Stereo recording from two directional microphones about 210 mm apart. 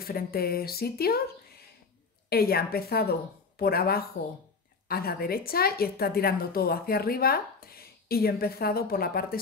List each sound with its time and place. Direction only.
0.0 s a woman's voice: 45° left (ahead or behind)
2.2 s a woman's voice: 45° left (ahead or behind)